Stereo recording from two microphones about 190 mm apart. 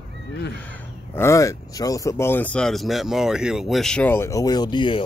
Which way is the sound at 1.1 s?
15° left (ahead or behind).